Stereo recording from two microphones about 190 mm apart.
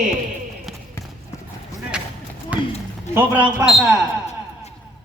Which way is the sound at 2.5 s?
10° right (ahead or behind).